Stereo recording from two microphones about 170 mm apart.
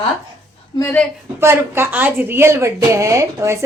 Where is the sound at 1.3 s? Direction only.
15° right (ahead or behind).